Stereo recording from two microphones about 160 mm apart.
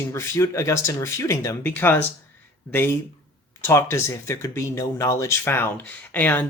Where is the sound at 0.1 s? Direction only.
20° left (ahead or behind).